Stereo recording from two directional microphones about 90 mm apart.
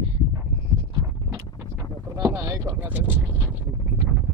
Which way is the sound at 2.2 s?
40° right (ahead or behind).